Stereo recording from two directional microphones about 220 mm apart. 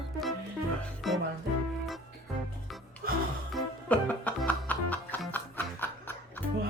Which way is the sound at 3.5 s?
5° left (ahead or behind).